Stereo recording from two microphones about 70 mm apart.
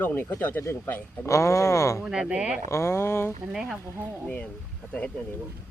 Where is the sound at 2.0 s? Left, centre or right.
Centre.